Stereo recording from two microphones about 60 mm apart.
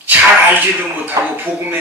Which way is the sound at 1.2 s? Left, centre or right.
Right.